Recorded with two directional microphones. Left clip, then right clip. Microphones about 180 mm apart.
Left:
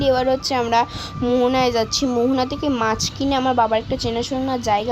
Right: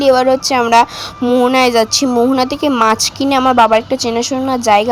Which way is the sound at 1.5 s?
25° right (ahead or behind).